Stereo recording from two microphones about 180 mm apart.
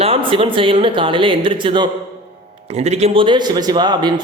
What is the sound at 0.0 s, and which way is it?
Speech, 30° right (ahead or behind).